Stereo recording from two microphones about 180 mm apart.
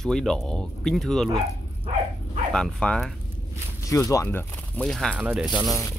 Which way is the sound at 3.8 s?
15° left (ahead or behind).